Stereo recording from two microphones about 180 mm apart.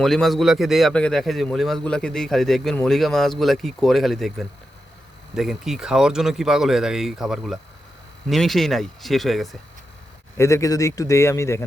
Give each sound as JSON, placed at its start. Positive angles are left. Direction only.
{"t": 0.0, "sound": "a man's voice", "side_deg": 0}
{"t": 10.3, "sound": "a man's voice", "side_deg": 15}